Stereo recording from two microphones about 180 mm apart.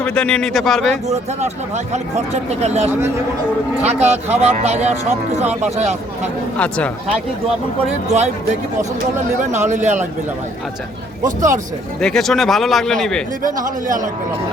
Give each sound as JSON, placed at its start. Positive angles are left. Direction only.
{"t": 0.0, "sound": "a man's voice", "side_deg": 5}
{"t": 1.0, "sound": "speech", "side_deg": -40}
{"t": 3.8, "sound": "speech", "side_deg": -35}
{"t": 6.6, "sound": "speech", "side_deg": 5}
{"t": 7.9, "sound": "speech", "side_deg": -40}
{"t": 9.4, "sound": "speech", "side_deg": -40}
{"t": 11.9, "sound": "a man's voice", "side_deg": 5}
{"t": 13.4, "sound": "speech", "side_deg": -45}